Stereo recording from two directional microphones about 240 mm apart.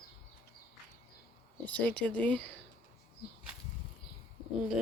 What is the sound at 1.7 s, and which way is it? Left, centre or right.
Speech, centre.